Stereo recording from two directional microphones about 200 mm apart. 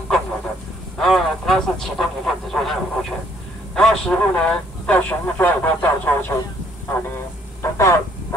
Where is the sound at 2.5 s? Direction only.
Centre (ahead or behind).